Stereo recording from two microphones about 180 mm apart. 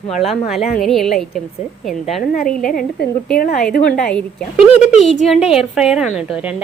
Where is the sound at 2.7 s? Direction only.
55° left (ahead or behind).